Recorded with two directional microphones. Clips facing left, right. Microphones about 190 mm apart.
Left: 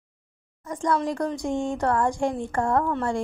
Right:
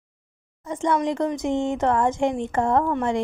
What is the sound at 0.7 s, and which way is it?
Speech, 25° right (ahead or behind).